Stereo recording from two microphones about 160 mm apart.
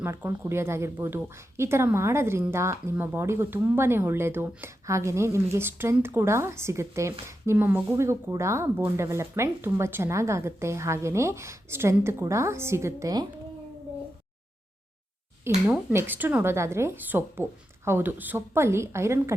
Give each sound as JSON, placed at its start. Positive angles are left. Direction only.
{"t": 0.0, "sound": "a woman's voice", "side_deg": -15}
{"t": 15.4, "sound": "a woman's voice", "side_deg": -10}